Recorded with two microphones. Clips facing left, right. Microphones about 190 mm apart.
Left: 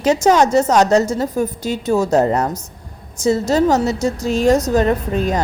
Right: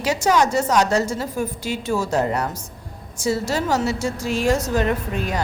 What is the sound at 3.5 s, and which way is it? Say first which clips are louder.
A woman's voice: left 7 dB; 40° left (ahead or behind).